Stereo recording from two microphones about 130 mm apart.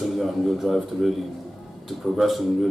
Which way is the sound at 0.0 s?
Centre (ahead or behind).